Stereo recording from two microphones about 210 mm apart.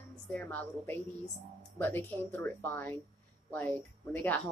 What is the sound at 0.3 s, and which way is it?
Speech, 10° left (ahead or behind).